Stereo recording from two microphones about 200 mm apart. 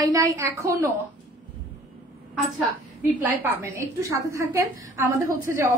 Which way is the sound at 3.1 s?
10° right (ahead or behind).